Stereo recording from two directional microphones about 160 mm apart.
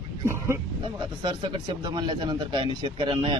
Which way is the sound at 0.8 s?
30° right (ahead or behind).